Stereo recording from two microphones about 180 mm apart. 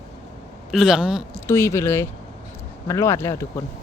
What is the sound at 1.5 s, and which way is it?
Speech, 15° left (ahead or behind).